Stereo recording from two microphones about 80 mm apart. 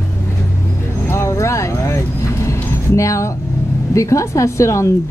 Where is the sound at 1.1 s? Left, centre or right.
Left.